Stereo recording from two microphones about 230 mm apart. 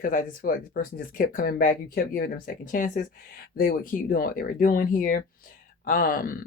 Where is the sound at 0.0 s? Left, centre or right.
Left.